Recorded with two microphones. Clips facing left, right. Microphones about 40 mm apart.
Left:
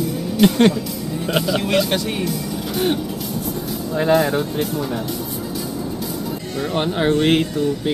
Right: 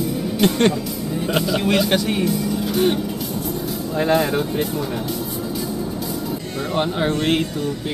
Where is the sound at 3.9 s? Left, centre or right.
Centre.